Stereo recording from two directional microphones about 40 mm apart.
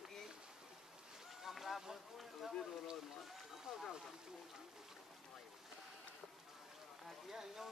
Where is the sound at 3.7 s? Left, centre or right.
Right.